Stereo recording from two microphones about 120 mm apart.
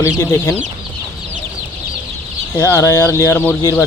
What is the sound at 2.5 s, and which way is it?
Speech, 25° left (ahead or behind).